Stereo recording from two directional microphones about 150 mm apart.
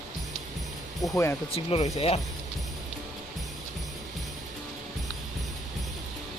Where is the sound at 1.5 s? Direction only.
40° left (ahead or behind).